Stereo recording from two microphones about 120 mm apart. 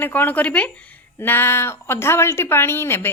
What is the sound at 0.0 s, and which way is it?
A woman's voice, 15° left (ahead or behind).